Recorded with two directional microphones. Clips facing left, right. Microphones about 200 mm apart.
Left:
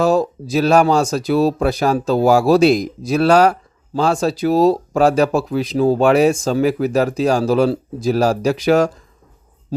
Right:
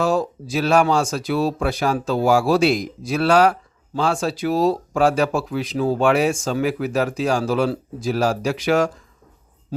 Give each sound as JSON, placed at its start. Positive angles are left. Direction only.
{"t": 0.0, "sound": "speech", "side_deg": 40}